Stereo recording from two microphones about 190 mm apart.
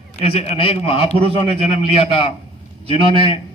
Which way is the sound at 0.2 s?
30° left (ahead or behind).